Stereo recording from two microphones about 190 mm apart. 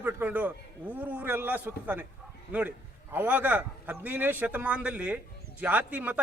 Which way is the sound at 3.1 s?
10° right (ahead or behind).